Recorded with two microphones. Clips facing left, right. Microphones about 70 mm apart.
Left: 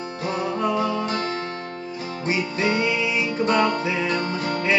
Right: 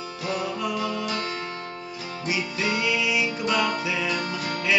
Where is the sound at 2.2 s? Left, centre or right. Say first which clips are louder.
Left 4 dB; left.